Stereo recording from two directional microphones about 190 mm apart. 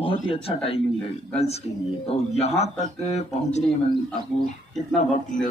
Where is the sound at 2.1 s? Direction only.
35° left (ahead or behind).